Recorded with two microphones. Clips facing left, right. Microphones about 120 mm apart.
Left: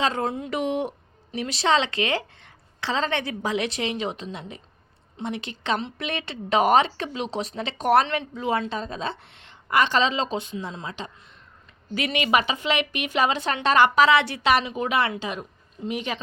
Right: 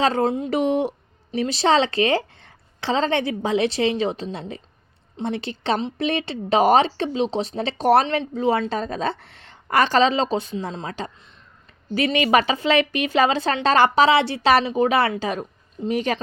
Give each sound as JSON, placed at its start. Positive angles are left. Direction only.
{"t": 0.0, "sound": "a woman's voice", "side_deg": -35}
{"t": 8.0, "sound": "speech", "side_deg": -20}
{"t": 8.4, "sound": "a woman's voice", "side_deg": -30}